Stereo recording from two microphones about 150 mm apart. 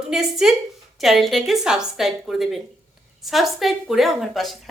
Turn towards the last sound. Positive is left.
turn(degrees=0)  # may be behind; listen again after turning